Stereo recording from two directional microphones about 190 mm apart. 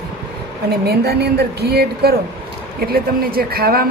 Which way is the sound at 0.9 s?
55° right (ahead or behind).